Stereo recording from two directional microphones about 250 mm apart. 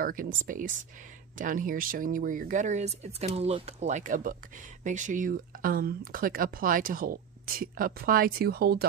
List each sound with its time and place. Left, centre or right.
0.0 s speech: right